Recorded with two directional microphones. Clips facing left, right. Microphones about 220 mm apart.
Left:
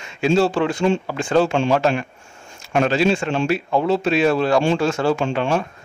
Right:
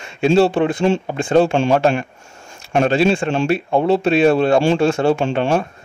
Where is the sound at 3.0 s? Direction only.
30° right (ahead or behind).